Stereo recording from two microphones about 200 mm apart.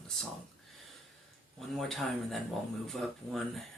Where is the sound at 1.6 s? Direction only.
Centre (ahead or behind).